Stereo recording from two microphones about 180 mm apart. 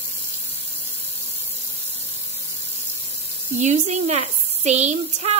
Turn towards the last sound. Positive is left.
turn(degrees=-40)  # may be behind; listen again after turning